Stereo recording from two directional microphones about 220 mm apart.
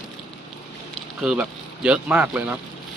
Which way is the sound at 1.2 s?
5° right (ahead or behind).